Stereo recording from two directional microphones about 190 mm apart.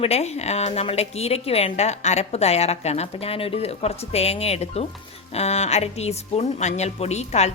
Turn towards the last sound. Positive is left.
turn(degrees=35)  # may be behind; listen again after turning